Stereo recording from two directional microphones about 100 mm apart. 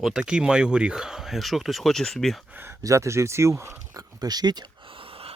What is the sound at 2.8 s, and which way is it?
Speech, 30° right (ahead or behind).